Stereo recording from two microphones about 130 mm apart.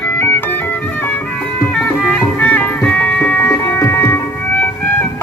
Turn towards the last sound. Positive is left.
turn(degrees=20)  # may be behind; listen again after turning